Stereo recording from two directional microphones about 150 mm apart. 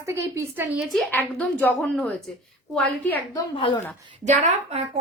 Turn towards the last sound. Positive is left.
turn(degrees=-50)  # may be behind; listen again after turning